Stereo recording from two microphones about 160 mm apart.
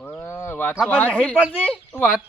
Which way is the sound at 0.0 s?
15° left (ahead or behind).